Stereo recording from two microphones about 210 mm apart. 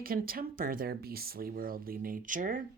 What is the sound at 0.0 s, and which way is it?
Speech, 45° right (ahead or behind).